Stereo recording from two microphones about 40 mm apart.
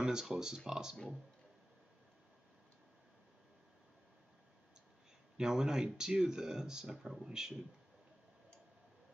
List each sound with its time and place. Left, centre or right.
0.0 s speech: centre
5.4 s speech: centre